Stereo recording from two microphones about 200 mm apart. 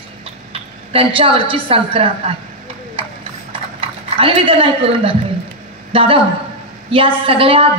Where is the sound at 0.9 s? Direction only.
25° right (ahead or behind).